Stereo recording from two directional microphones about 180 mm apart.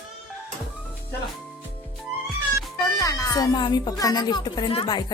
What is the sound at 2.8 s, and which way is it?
Speech, 20° left (ahead or behind).